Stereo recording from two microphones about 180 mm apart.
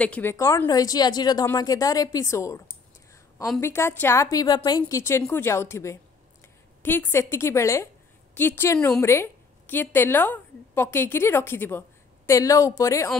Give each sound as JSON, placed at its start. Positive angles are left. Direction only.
{"t": 0.0, "sound": "speech", "side_deg": 10}
{"t": 3.6, "sound": "a woman's voice", "side_deg": 15}